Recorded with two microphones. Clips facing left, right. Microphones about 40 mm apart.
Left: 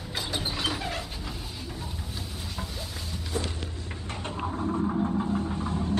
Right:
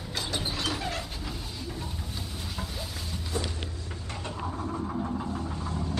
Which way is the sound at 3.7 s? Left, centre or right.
Left.